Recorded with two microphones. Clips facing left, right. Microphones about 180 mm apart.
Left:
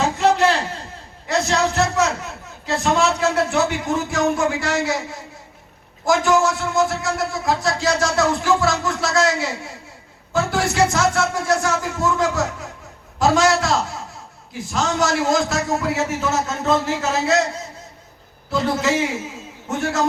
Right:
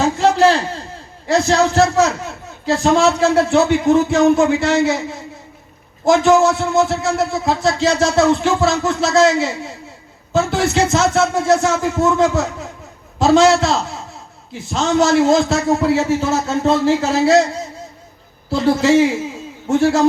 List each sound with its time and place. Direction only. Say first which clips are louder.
0.0 s a sound: right 4 dB; 30° right (ahead or behind)
1.3 s a man's voice: right 5 dB; 30° right (ahead or behind)
18.5 s speech: right 7 dB; 30° right (ahead or behind)